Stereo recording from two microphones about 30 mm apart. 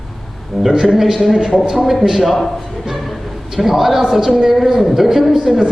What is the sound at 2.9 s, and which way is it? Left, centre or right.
Music, centre.